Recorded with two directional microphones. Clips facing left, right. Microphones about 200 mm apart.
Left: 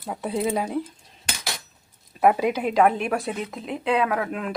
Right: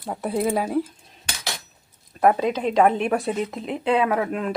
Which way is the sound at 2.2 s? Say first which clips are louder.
Right 1 dB; 10° left (ahead or behind).